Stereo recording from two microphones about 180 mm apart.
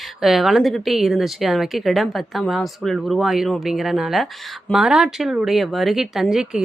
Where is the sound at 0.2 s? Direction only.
Centre (ahead or behind).